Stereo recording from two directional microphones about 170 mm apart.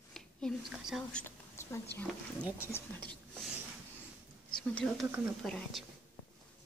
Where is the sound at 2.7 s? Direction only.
10° left (ahead or behind).